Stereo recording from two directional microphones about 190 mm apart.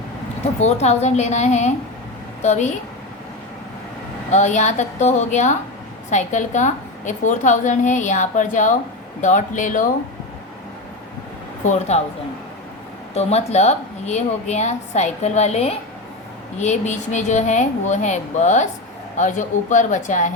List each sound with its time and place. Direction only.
0.6 s a woman's voice: 35° left (ahead or behind)
4.3 s a woman's voice: 40° left (ahead or behind)
11.6 s a woman's voice: 40° left (ahead or behind)
13.1 s a woman's voice: 35° left (ahead or behind)